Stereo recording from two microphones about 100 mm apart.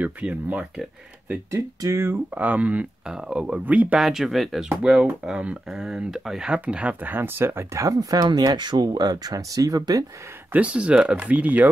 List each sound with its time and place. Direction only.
0.0 s speech: 15° right (ahead or behind)
1.5 s speech: 30° right (ahead or behind)
2.3 s speech: 15° right (ahead or behind)
4.0 s speech: centre (ahead or behind); by 10.0 s 40° right (ahead or behind)
10.5 s speech: 10° right (ahead or behind)